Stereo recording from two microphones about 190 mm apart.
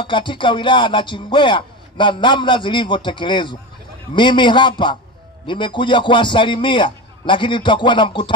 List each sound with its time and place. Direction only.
0.0 s chopping: 25° left (ahead or behind)